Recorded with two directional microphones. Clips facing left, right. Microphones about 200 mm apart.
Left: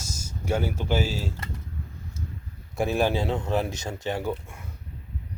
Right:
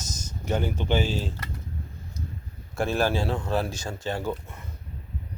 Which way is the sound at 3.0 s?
20° left (ahead or behind).